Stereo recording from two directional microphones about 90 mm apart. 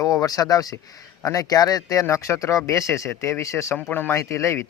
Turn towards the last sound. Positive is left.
turn(degrees=30)  # may be behind; listen again after turning